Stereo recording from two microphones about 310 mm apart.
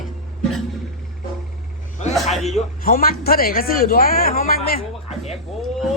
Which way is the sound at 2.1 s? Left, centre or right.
Centre.